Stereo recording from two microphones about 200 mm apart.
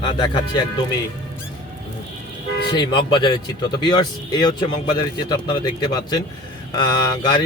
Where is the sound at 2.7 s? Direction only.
25° left (ahead or behind).